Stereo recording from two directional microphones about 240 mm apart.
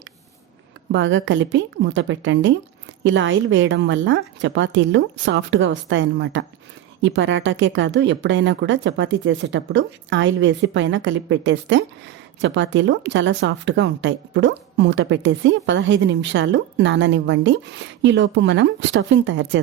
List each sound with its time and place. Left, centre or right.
0.9 s speech: right